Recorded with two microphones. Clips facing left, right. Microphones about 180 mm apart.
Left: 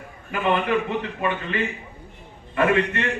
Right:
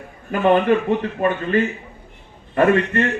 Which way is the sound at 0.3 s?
40° right (ahead or behind).